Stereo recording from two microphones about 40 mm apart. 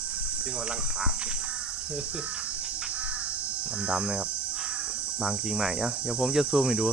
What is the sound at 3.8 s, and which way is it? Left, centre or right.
Speech, right.